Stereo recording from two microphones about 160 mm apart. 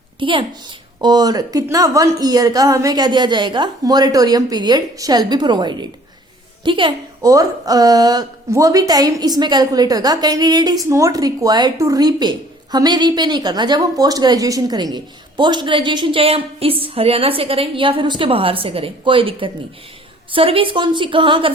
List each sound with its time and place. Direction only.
0.2 s a woman's voice: 30° right (ahead or behind)